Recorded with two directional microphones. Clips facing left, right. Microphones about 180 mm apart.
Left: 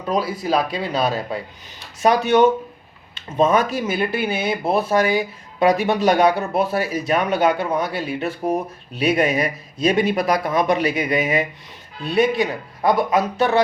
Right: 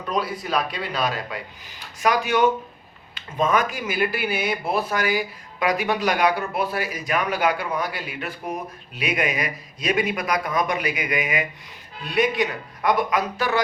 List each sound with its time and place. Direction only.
0.1 s speech: 30° left (ahead or behind)
3.4 s speech: 30° left (ahead or behind)